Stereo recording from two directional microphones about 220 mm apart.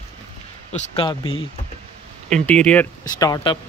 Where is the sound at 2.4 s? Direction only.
5° left (ahead or behind).